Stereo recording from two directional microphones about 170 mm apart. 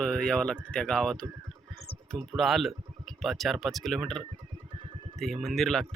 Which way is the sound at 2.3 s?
Centre (ahead or behind).